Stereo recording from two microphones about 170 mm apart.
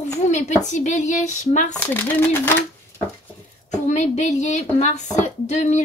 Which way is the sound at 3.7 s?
45° left (ahead or behind).